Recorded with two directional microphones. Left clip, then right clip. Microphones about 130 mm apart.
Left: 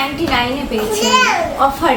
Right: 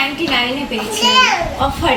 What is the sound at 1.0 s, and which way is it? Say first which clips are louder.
Speech: right 2 dB; 25° left (ahead or behind).